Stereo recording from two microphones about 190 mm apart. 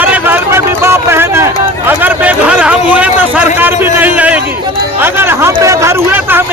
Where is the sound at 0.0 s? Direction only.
10° right (ahead or behind).